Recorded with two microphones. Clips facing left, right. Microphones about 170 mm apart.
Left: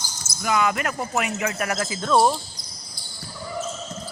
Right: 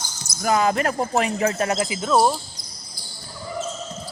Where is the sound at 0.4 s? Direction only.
35° right (ahead or behind); by 2.4 s centre (ahead or behind).